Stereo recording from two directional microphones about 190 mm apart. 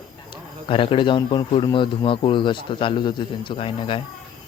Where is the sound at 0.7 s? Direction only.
30° left (ahead or behind).